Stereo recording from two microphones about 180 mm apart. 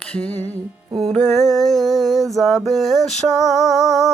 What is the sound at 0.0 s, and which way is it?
Music, 5° left (ahead or behind).